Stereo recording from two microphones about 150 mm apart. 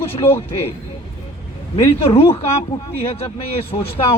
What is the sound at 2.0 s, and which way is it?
Speech, 40° left (ahead or behind).